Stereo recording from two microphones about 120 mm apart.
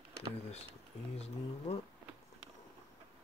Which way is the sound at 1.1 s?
60° left (ahead or behind).